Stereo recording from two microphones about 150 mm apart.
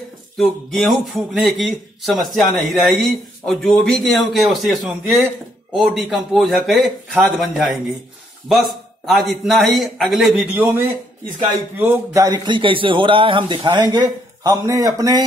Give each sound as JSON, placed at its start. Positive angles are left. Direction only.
{"t": 0.4, "sound": "a man's voice", "side_deg": 0}
{"t": 10.3, "sound": "a man's voice", "side_deg": -10}
{"t": 11.8, "sound": "a man's voice", "side_deg": -15}